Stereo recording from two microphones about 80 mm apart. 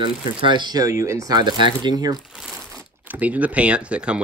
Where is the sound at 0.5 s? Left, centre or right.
Right.